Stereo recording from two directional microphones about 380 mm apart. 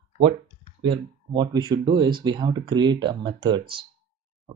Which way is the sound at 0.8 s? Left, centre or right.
Centre.